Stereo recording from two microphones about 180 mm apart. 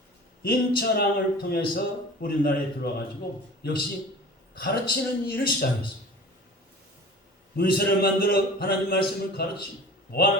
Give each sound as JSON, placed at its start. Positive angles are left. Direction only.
{"t": 0.4, "sound": "a man's voice", "side_deg": 55}
{"t": 7.5, "sound": "a man's voice", "side_deg": 55}